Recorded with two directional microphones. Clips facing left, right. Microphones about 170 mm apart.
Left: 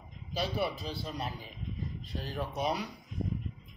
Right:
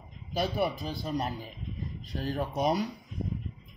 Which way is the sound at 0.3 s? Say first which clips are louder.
Right 4 dB; 50° right (ahead or behind).